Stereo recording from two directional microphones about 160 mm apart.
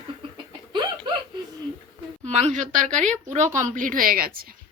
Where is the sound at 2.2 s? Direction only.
45° right (ahead or behind); by 4.5 s 65° right (ahead or behind).